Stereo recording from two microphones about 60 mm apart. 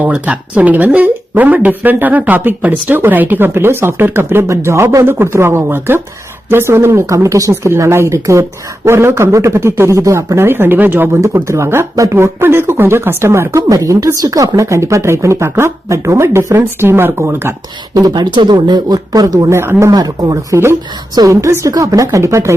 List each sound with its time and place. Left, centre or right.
0.0 s speech: right
4.4 s a woman's voice: right
7.1 s speech: right
7.5 s a woman's voice: right
10.0 s speech: right
11.4 s a woman's voice: right
13.7 s a woman's voice: right
18.7 s a man's voice: right
19.5 s a woman's voice: right
19.9 s a man's voice: right
21.2 s speech: right